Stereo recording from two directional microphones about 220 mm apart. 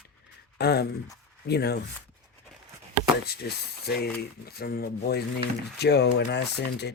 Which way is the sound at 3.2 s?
45° left (ahead or behind).